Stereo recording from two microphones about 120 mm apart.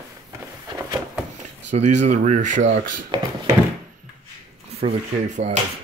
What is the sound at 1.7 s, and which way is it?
Speech, 70° right (ahead or behind).